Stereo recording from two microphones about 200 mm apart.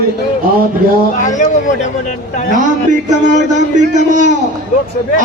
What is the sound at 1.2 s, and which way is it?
Speech, 40° left (ahead or behind).